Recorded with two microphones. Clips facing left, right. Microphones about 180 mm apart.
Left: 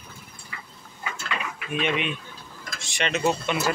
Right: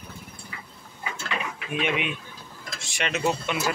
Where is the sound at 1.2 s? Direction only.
10° right (ahead or behind).